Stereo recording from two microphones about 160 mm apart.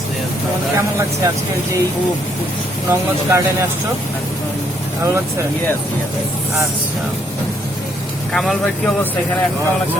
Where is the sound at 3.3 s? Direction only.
20° right (ahead or behind).